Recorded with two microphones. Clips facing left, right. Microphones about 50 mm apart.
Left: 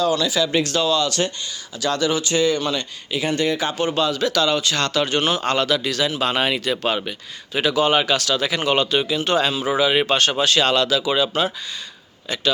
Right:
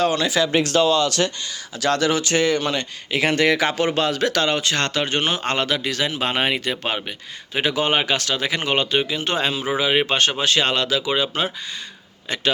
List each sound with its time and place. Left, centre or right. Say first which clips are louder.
0.0 s speech: even; right; by 11.5 s centre
12.3 s speech: even; right